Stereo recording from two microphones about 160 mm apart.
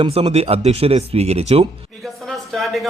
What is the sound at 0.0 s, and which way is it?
Speech, 40° right (ahead or behind).